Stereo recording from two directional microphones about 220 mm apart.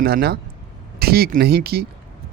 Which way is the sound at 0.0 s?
45° right (ahead or behind).